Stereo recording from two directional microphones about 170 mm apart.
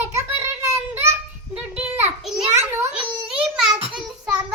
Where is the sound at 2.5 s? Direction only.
15° right (ahead or behind).